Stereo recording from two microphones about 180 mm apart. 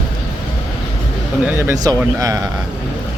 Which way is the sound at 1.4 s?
10° right (ahead or behind).